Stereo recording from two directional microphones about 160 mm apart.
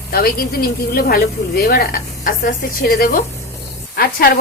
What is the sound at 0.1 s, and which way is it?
Speech, 70° left (ahead or behind).